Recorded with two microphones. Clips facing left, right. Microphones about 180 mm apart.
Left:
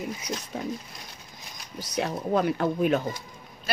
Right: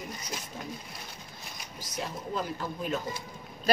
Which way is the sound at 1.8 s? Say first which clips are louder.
Left 8 dB; 70° left (ahead or behind).